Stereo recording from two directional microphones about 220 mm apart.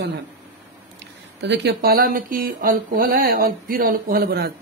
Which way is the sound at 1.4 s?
50° right (ahead or behind).